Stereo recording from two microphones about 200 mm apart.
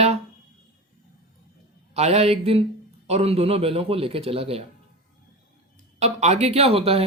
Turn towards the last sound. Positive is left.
turn(degrees=-30)  # may be behind; listen again after turning